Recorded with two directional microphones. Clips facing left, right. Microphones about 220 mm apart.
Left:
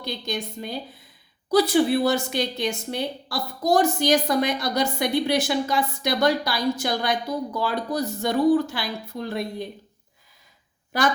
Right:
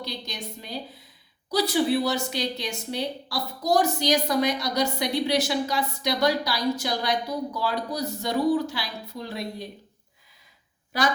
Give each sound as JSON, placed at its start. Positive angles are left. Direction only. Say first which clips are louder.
{"t": 0.0, "sound": "a woman's voice", "louder": "left 5 dB", "side_deg": 50}